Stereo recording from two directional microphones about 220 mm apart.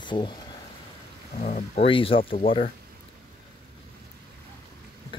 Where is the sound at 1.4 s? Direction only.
30° left (ahead or behind).